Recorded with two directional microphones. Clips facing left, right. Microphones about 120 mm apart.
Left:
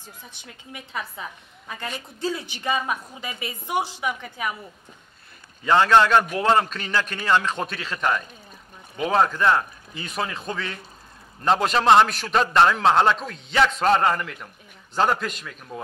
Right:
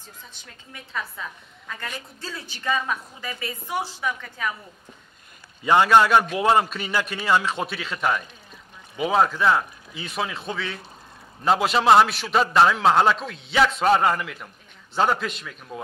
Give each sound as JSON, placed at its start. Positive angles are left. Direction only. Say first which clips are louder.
{"t": 0.3, "sound": "a woman's voice", "louder": "left 4 dB", "side_deg": 15}
{"t": 5.6, "sound": "a man's voice", "louder": "even", "side_deg": -15}